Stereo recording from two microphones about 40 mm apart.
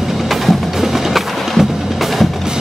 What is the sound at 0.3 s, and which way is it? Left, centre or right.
Music, centre.